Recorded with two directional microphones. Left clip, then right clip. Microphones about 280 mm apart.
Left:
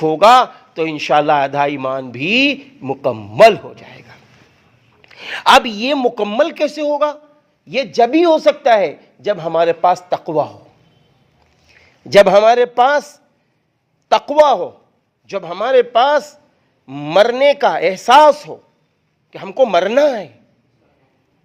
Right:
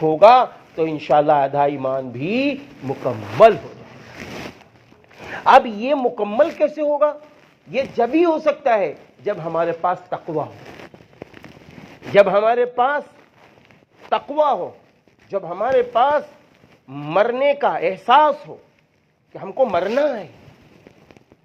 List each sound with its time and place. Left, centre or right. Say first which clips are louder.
0.0 s a man's voice: left 2 dB; left
5.0 s a man's voice: left 4 dB; left
12.1 s a man's voice: left 6 dB; left
14.1 s a man's voice: left 7 dB; left